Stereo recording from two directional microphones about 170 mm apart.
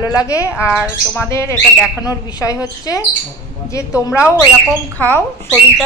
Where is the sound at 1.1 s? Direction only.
15° left (ahead or behind).